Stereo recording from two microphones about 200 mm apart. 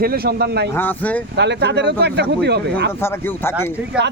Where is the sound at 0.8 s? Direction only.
10° left (ahead or behind).